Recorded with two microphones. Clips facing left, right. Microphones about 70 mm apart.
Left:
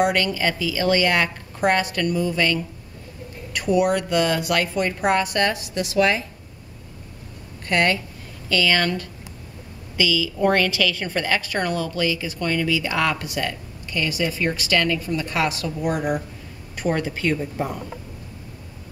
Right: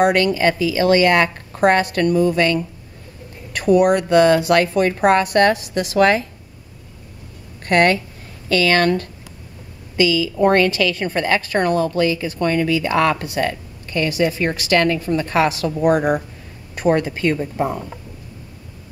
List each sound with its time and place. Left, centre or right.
0.0 s a woman's voice: right
3.6 s speech: right
7.6 s speech: right
10.0 s a woman's voice: right